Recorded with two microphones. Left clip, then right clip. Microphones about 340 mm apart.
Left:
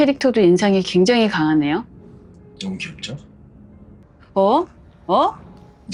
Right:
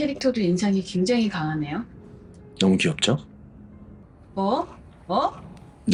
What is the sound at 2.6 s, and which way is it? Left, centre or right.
Speech, right.